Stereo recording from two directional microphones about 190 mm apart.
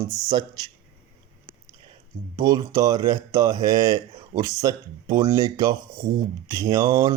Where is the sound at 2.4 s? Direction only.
20° right (ahead or behind).